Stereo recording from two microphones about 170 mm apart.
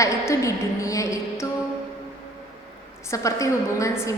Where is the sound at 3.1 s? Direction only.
20° left (ahead or behind).